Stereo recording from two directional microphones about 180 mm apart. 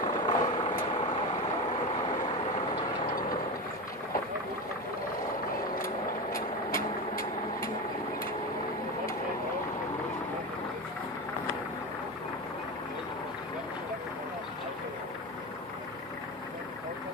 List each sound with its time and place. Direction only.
0.0 s vehicle: 25° left (ahead or behind)
6.3 s vehicle: 50° left (ahead or behind)